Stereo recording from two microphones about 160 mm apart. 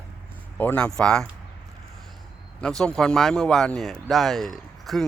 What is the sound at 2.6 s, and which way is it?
Speech, 5° left (ahead or behind).